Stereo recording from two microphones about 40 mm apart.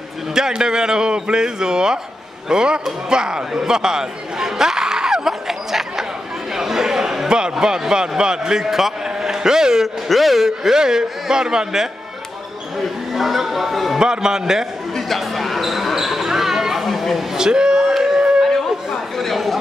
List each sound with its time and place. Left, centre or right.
0.6 s a man's voice: centre
10.0 s speech: centre
13.1 s speech: centre
13.9 s speech: centre
15.0 s basketball bounce: centre
17.4 s a man's voice: centre
17.9 s a sound: centre
19.1 s speech: centre